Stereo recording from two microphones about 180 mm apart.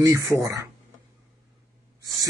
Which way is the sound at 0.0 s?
15° right (ahead or behind).